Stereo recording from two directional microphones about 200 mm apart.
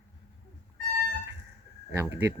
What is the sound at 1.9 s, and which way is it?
Speech, 10° right (ahead or behind).